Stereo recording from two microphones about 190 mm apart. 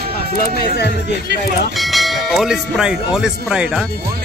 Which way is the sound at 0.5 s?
60° left (ahead or behind).